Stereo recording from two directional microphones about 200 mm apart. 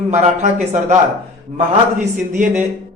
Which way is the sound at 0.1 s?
35° right (ahead or behind).